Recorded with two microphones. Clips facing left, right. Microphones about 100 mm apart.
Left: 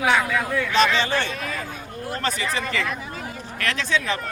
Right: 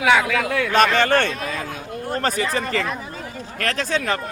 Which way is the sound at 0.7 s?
55° right (ahead or behind).